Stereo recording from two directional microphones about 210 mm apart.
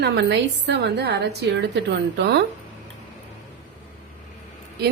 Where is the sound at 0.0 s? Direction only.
55° right (ahead or behind).